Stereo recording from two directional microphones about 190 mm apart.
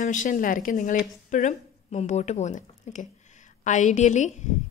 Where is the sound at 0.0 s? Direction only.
40° left (ahead or behind).